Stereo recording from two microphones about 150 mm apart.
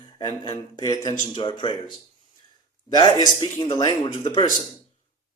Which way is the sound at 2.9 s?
25° left (ahead or behind).